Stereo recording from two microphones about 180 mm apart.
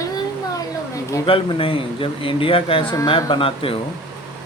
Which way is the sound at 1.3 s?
30° left (ahead or behind).